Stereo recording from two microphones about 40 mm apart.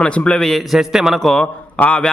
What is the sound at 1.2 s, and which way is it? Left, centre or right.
Speech, centre.